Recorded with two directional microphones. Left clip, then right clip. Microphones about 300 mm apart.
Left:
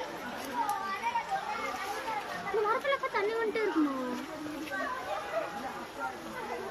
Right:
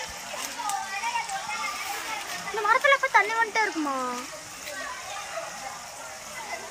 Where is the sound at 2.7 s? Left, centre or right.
Centre.